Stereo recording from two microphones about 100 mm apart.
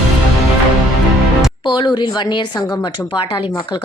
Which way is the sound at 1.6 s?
50° left (ahead or behind).